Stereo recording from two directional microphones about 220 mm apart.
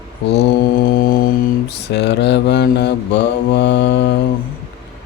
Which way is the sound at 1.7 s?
50° left (ahead or behind).